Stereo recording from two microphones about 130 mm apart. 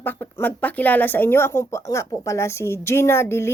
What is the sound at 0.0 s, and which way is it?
Speech, 15° left (ahead or behind).